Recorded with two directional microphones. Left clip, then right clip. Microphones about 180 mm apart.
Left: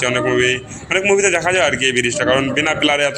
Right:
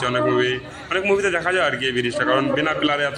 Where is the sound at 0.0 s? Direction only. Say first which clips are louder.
Left 4 dB; 10° left (ahead or behind).